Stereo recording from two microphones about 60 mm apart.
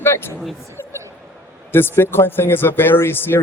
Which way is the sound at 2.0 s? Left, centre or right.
Left.